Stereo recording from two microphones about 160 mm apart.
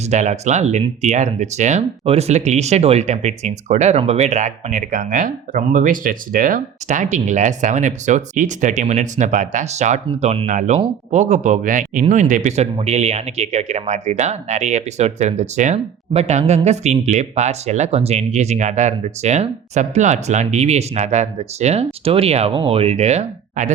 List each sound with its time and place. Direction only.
0.0 s speech: 45° right (ahead or behind)